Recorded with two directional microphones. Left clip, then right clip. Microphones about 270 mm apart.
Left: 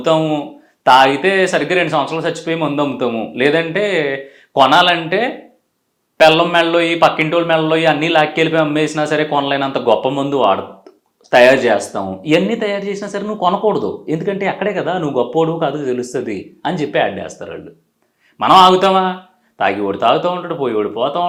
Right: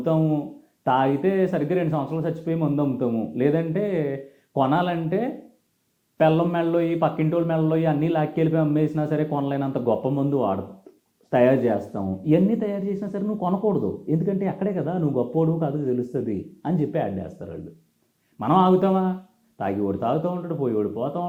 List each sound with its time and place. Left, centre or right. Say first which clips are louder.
0.0 s a man's voice: left 9 dB; centre